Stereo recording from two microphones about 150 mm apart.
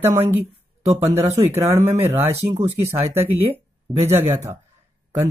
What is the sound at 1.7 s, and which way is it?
Speech, 45° right (ahead or behind).